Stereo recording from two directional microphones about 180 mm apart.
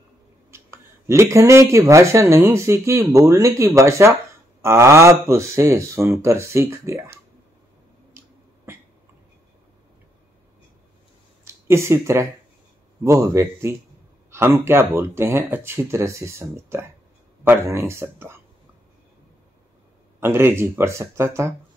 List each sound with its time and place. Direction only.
0.5 s speech: 15° right (ahead or behind)
11.4 s speech: 15° right (ahead or behind)
20.2 s speech: 15° right (ahead or behind)